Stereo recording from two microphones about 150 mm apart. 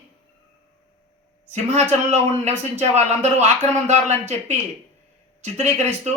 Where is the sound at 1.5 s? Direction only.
50° right (ahead or behind).